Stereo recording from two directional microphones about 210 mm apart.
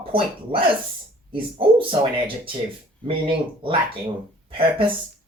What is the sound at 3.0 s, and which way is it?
Speech, 25° right (ahead or behind).